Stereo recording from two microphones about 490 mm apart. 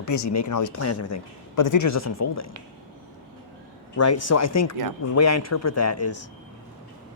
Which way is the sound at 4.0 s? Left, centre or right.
Left.